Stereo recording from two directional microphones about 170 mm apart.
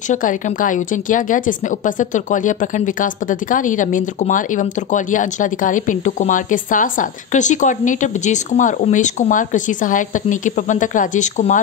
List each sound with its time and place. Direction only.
0.1 s speech: 50° left (ahead or behind)